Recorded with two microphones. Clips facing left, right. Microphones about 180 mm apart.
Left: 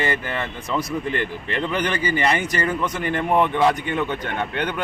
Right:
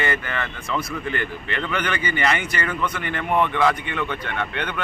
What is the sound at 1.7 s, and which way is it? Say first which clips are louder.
Speech: left 2 dB; 35° left (ahead or behind).